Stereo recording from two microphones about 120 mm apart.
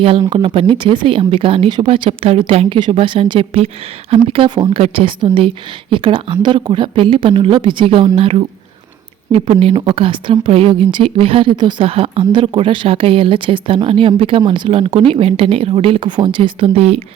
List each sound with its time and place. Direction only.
0.2 s speech: 40° right (ahead or behind)
12.2 s speech: 40° right (ahead or behind); by 17.0 s 55° right (ahead or behind)